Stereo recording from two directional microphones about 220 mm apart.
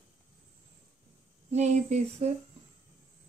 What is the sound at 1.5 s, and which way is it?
Speech, 30° right (ahead or behind).